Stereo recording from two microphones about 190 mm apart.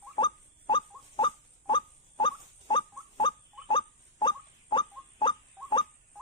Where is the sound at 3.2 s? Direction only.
25° left (ahead or behind).